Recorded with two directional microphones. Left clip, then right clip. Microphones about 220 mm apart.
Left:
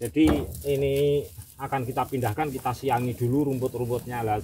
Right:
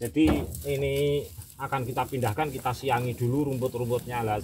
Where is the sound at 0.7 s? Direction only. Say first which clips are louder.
Left 3 dB; 15° left (ahead or behind).